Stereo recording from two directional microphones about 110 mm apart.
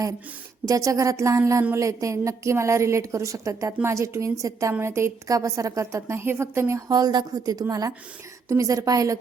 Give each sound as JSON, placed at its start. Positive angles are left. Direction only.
{"t": 0.7, "sound": "a woman's voice", "side_deg": -30}